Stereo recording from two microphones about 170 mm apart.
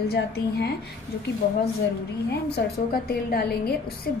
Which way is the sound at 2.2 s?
75° left (ahead or behind).